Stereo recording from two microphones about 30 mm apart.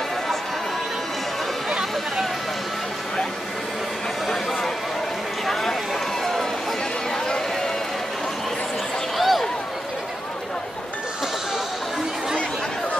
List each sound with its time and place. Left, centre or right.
1.7 s chatter: centre
5.5 s run: centre
9.2 s a sound: centre